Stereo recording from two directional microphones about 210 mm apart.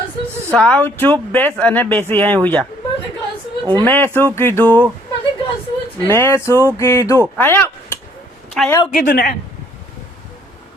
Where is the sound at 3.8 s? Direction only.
10° left (ahead or behind).